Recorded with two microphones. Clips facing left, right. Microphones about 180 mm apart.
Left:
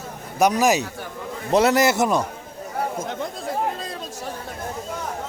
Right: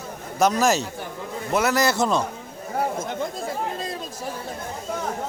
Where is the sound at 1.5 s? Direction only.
25° left (ahead or behind).